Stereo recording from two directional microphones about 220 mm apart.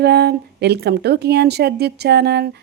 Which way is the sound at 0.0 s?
45° right (ahead or behind).